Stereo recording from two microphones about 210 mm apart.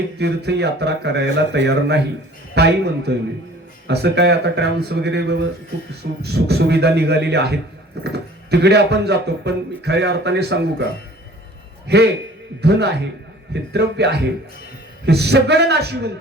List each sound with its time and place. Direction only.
0.2 s speech: 50° right (ahead or behind)
11.9 s speech: 50° right (ahead or behind)
13.5 s speech: 55° right (ahead or behind)